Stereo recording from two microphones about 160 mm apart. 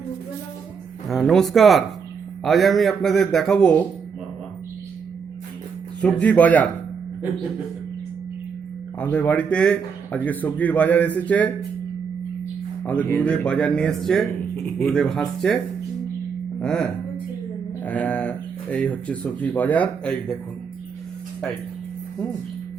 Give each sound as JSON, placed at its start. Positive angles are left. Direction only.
{"t": 1.0, "sound": "a man's voice", "side_deg": 0}
{"t": 6.0, "sound": "speech", "side_deg": 5}
{"t": 9.0, "sound": "speech", "side_deg": 10}
{"t": 12.8, "sound": "a man's voice", "side_deg": 10}
{"t": 16.6, "sound": "a man's voice", "side_deg": 5}